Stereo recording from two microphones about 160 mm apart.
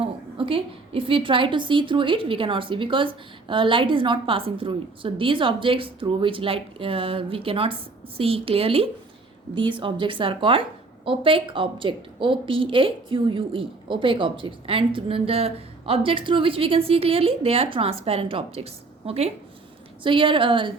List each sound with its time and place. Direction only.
0.0 s a woman's voice: 35° right (ahead or behind)